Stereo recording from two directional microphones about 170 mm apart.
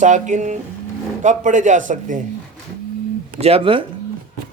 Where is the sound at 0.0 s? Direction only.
45° right (ahead or behind).